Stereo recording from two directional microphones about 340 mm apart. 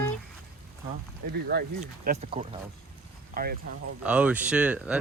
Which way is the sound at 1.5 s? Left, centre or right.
Right.